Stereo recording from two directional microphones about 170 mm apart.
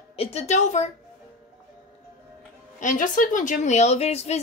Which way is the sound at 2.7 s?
50° left (ahead or behind).